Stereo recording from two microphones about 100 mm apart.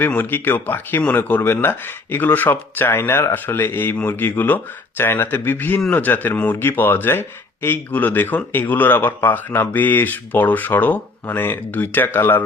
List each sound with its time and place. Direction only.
0.0 s speech: 20° left (ahead or behind)